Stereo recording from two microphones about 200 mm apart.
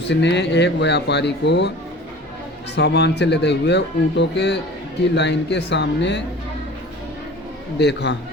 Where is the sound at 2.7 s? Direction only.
55° left (ahead or behind).